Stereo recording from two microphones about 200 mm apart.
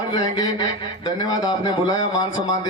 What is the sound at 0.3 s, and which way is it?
Speech, 20° left (ahead or behind).